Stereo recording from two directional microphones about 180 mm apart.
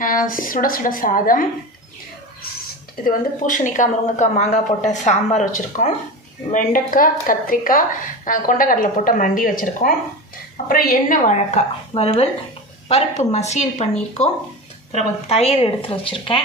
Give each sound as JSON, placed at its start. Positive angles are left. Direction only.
{"t": 0.0, "sound": "a woman's voice", "side_deg": 50}
{"t": 3.1, "sound": "a woman's voice", "side_deg": 45}
{"t": 15.3, "sound": "speech", "side_deg": 35}